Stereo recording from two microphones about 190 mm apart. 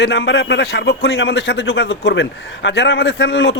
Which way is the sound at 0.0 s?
70° left (ahead or behind).